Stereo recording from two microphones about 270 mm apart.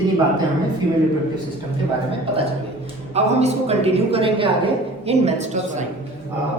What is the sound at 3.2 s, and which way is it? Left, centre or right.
A woman's voice, right.